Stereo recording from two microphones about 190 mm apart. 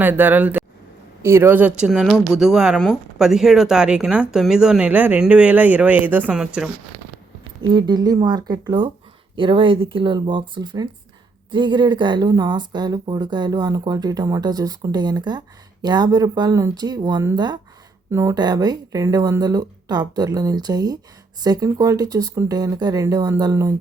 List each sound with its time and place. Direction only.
0.0 s speech: 10° right (ahead or behind)
7.6 s speech: 25° right (ahead or behind)